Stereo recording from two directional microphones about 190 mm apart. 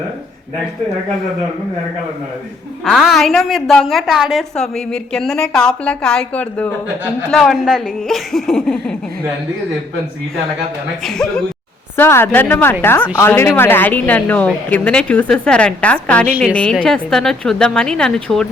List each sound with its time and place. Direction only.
2.8 s a woman's voice: centre (ahead or behind)
11.0 s a woman's voice: centre (ahead or behind)